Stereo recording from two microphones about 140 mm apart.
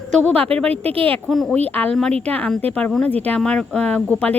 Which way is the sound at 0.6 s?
45° right (ahead or behind).